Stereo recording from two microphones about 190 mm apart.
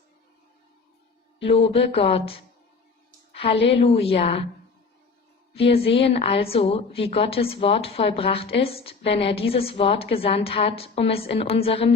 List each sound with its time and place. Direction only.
1.4 s a woman's voice: 30° left (ahead or behind)
5.5 s a woman's voice: 30° left (ahead or behind)